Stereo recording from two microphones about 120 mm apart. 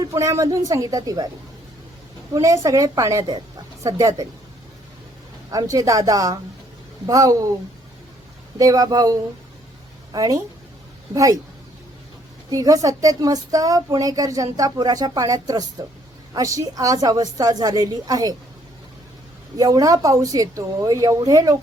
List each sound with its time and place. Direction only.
0.0 s a woman's voice: 30° right (ahead or behind)
2.3 s a woman's voice: 25° right (ahead or behind)
5.5 s a woman's voice: 30° right (ahead or behind)
8.5 s a woman's voice: 30° right (ahead or behind)
12.5 s speech: 30° right (ahead or behind)
19.5 s a woman's voice: 30° right (ahead or behind)